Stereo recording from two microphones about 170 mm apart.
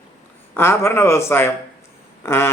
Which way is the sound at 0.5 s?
15° left (ahead or behind).